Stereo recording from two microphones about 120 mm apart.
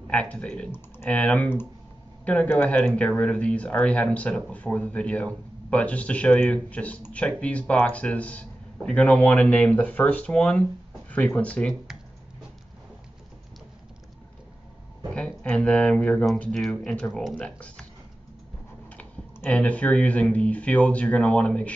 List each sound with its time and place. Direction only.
0.1 s speech: 10° left (ahead or behind)
15.1 s speech: 10° left (ahead or behind)
18.9 s speech: 10° left (ahead or behind)